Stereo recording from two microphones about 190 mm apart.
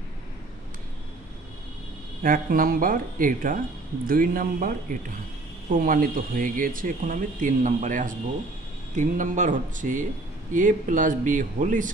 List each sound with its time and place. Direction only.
2.2 s speech: 45° right (ahead or behind)